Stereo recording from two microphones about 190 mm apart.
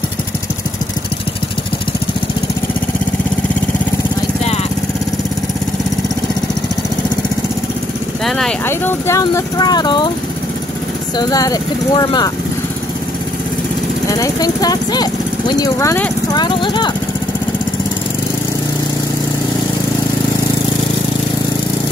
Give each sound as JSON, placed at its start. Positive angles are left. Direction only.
{"t": 8.3, "sound": "speech", "side_deg": 0}
{"t": 8.6, "sound": "speech", "side_deg": 15}
{"t": 11.1, "sound": "speech", "side_deg": 20}
{"t": 14.0, "sound": "speech", "side_deg": 20}